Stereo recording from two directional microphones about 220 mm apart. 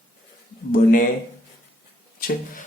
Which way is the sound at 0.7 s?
40° left (ahead or behind).